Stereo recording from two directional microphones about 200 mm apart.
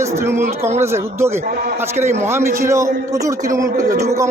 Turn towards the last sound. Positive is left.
turn(degrees=-15)  # may be behind; listen again after turning